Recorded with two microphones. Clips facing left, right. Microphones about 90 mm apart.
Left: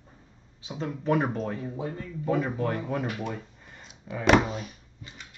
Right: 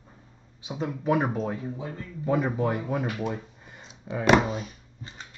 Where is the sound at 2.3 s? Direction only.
15° right (ahead or behind).